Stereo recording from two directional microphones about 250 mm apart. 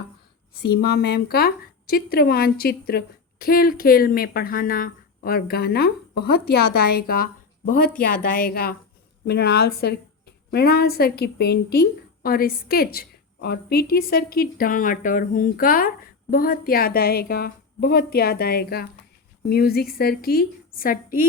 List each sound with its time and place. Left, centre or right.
0.6 s a woman's voice: left